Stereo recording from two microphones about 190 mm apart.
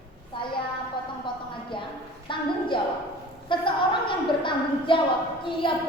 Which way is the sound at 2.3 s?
25° left (ahead or behind).